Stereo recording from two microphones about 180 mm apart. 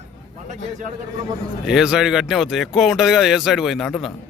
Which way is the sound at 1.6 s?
5° right (ahead or behind).